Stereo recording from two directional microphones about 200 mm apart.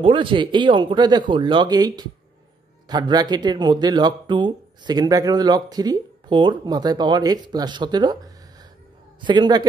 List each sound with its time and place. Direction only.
0.0 s speech: 25° right (ahead or behind)